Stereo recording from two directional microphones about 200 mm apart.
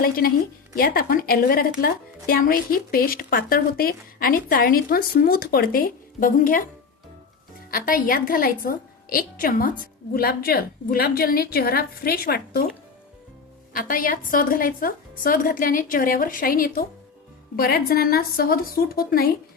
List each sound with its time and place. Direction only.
0.0 s a woman's voice: 45° left (ahead or behind)
7.7 s a woman's voice: 45° left (ahead or behind)
13.7 s a woman's voice: 45° left (ahead or behind)